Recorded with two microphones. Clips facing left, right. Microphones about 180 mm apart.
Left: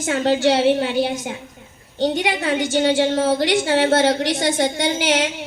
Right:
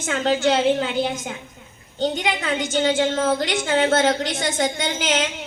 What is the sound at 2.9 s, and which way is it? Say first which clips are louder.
A woman's voice: left 3 dB; 35° left (ahead or behind).